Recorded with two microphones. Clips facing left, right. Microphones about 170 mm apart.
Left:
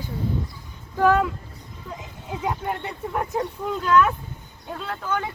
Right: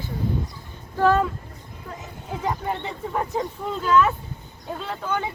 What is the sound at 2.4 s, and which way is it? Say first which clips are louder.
Speech: right 1 dB; 5° left (ahead or behind).